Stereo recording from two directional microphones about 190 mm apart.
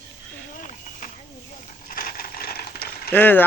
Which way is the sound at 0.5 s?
45° left (ahead or behind).